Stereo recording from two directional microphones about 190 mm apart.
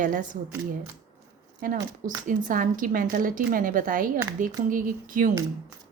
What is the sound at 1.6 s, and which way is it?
A woman's voice, 45° right (ahead or behind).